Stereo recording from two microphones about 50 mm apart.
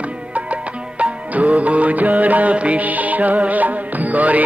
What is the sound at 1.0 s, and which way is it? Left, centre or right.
Music, right.